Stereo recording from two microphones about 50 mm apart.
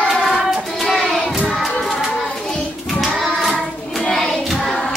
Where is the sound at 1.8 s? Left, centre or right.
Centre.